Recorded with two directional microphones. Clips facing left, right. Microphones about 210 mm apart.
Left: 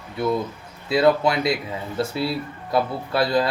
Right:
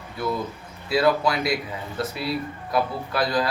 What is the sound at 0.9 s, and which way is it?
Speech, 25° left (ahead or behind).